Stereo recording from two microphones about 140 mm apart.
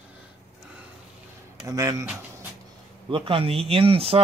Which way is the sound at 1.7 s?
20° right (ahead or behind).